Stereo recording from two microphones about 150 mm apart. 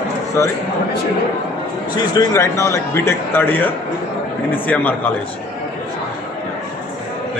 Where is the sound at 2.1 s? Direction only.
25° left (ahead or behind).